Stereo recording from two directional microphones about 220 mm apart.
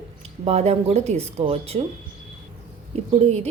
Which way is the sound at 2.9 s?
30° right (ahead or behind).